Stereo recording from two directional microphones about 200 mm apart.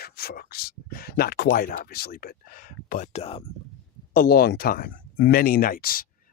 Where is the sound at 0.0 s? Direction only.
50° left (ahead or behind); by 3.4 s 30° left (ahead or behind).